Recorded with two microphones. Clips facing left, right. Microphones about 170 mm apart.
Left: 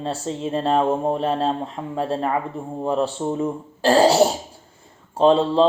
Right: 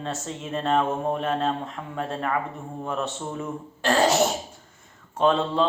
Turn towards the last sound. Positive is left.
turn(degrees=30)  # may be behind; listen again after turning